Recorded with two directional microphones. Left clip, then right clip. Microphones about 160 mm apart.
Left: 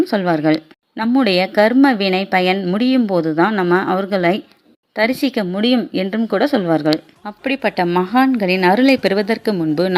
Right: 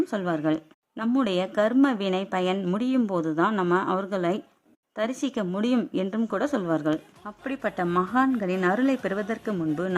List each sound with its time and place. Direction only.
0.0 s speech: 20° left (ahead or behind)